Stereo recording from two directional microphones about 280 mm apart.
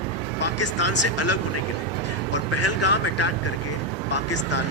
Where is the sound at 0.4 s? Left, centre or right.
Left.